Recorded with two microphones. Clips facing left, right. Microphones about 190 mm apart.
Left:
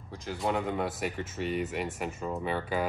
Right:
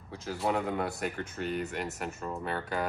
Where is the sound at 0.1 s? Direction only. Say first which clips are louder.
Even; centre (ahead or behind).